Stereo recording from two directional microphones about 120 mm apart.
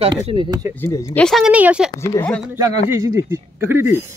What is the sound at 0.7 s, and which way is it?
Speech, 20° left (ahead or behind).